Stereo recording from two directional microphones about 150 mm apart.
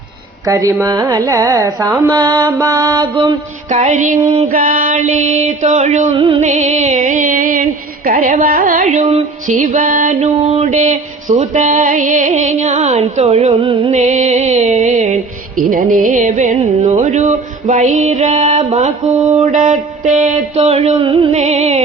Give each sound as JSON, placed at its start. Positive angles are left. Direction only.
{"t": 0.4, "sound": "carnatic music", "side_deg": -20}
{"t": 3.7, "sound": "music", "side_deg": -55}
{"t": 4.4, "sound": "a sound", "side_deg": -65}
{"t": 6.1, "sound": "music", "side_deg": -35}
{"t": 6.4, "sound": "music", "side_deg": -50}
{"t": 9.6, "sound": "music", "side_deg": -65}
{"t": 13.9, "sound": "music", "side_deg": -50}
{"t": 15.7, "sound": "a sound", "side_deg": -65}
{"t": 17.0, "sound": "music", "side_deg": -50}
{"t": 19.5, "sound": "a sound", "side_deg": -55}
{"t": 21.3, "sound": "music", "side_deg": -45}